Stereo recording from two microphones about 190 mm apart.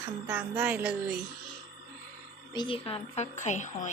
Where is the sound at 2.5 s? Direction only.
25° left (ahead or behind).